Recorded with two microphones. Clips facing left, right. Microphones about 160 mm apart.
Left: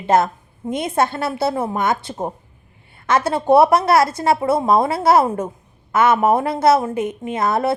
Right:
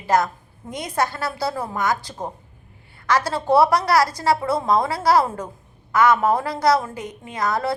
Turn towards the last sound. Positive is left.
turn(degrees=25)  # may be behind; listen again after turning